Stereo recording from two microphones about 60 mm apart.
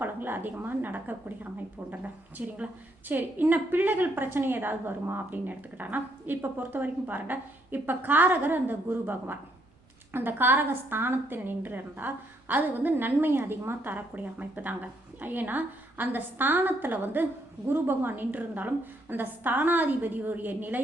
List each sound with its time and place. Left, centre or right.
0.0 s a woman's voice: right
2.4 s a woman's voice: right